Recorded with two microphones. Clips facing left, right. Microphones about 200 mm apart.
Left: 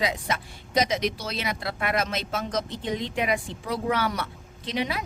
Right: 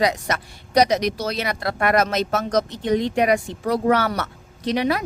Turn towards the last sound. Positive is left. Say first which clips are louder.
# right 8 dB
turn(degrees=-45)  # may be behind; listen again after turning